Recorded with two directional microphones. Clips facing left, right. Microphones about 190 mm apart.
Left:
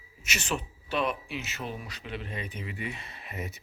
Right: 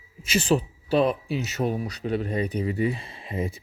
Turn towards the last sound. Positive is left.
turn(degrees=-30)  # may be behind; listen again after turning